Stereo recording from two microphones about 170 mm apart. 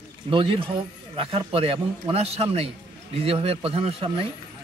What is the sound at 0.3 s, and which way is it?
Speech, 30° right (ahead or behind).